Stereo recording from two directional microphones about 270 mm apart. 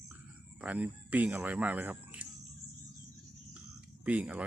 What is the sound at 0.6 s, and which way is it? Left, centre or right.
Speech, centre.